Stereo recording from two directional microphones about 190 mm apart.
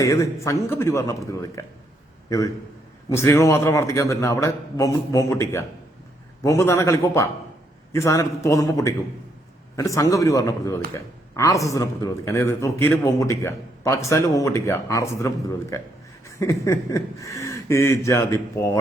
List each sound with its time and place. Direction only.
0.0 s a man's voice: 15° left (ahead or behind)
3.1 s a man's voice: 15° left (ahead or behind)